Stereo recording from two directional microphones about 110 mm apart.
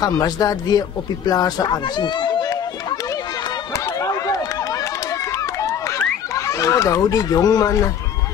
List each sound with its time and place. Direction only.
0.0 s speech: 35° left (ahead or behind)
3.7 s run: 35° left (ahead or behind)
5.3 s a sound: 30° left (ahead or behind)